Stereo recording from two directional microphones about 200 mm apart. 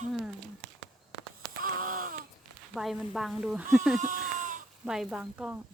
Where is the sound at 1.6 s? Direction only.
45° right (ahead or behind).